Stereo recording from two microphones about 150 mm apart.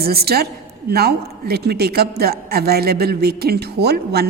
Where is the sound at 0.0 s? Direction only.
90° right.